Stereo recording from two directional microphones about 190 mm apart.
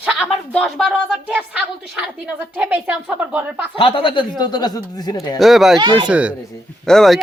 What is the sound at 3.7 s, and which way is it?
Speech, 30° left (ahead or behind).